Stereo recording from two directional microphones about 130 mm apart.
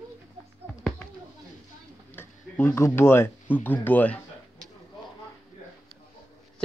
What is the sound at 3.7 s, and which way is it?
Speech, 15° left (ahead or behind).